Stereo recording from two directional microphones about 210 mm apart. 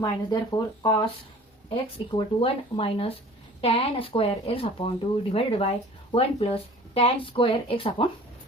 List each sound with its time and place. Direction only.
0.0 s speech: 20° left (ahead or behind)